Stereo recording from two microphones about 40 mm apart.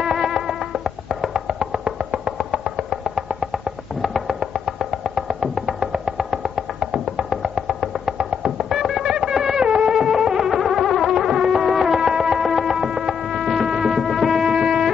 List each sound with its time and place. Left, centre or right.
0.0 s music: centre
9.7 s music: right